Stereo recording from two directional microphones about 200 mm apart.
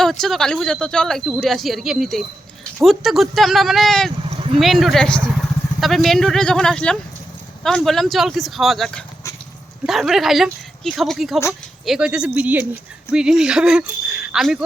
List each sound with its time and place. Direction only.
0.0 s speech: centre (ahead or behind)
9.2 s dog: 15° left (ahead or behind)
9.8 s speech: centre (ahead or behind)